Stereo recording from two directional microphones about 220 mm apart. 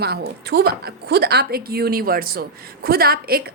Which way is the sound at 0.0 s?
45° right (ahead or behind).